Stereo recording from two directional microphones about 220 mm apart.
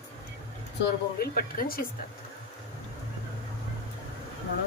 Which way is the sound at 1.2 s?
40° left (ahead or behind).